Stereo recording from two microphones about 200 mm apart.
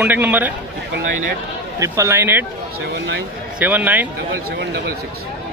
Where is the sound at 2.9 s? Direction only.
60° right (ahead or behind).